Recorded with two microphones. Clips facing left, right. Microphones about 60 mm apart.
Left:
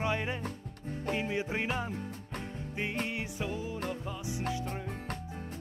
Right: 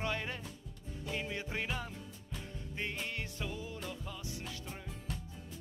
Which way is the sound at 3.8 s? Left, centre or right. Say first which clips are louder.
Left 7 dB; left.